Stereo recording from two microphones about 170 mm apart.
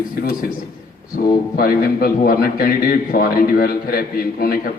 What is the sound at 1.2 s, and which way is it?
A man's voice, 60° left (ahead or behind).